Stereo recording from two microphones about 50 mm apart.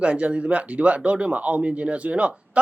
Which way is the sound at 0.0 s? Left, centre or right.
Right.